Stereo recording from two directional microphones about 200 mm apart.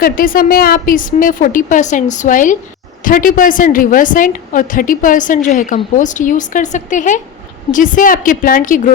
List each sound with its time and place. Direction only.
0.0 s a woman's voice: 45° left (ahead or behind)